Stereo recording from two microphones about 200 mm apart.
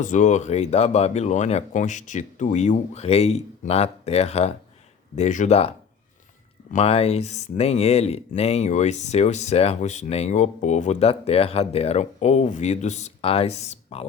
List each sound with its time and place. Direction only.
0.0 s speech: 40° left (ahead or behind)
6.7 s speech: 30° left (ahead or behind)